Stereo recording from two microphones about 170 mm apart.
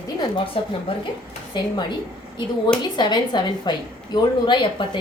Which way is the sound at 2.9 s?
25° left (ahead or behind).